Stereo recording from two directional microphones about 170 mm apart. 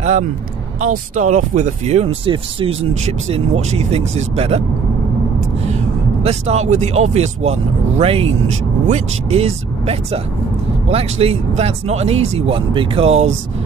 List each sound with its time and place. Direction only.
0.7 s speech: 45° right (ahead or behind)
6.2 s speech: 40° right (ahead or behind)